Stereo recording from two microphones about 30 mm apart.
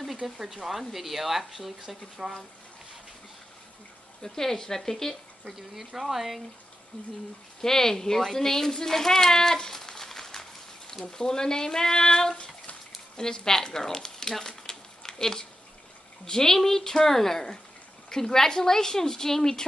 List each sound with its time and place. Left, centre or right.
0.2 s speech: centre
4.2 s a woman's voice: centre
5.8 s speech: centre
7.6 s a child's voice: centre
14.4 s a sound: centre
15.1 s a woman's voice: centre